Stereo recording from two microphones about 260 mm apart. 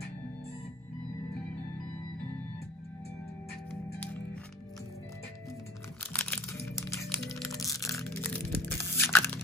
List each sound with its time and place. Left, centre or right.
6.1 s music: centre
7.9 s crushing: centre